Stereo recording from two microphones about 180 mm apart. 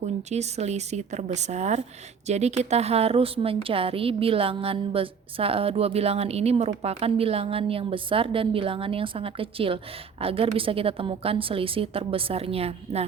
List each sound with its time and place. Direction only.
0.2 s a woman's voice: 40° right (ahead or behind)